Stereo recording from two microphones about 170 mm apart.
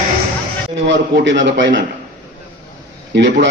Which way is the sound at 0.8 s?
90° right.